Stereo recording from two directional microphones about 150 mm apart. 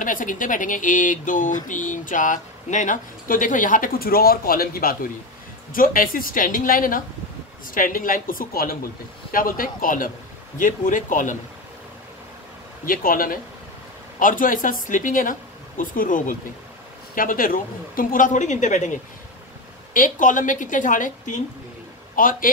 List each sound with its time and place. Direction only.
0.0 s a woman's voice: 65° left (ahead or behind)
12.8 s a woman's voice: 70° left (ahead or behind); by 18.9 s 55° left (ahead or behind)
19.9 s a man's voice: 60° left (ahead or behind)